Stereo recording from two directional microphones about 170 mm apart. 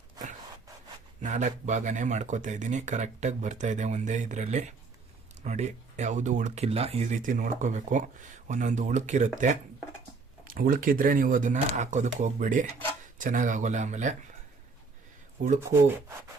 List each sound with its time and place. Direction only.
1.2 s speech: 45° right (ahead or behind)
10.4 s speech: 55° right (ahead or behind)
15.6 s speech: 15° right (ahead or behind)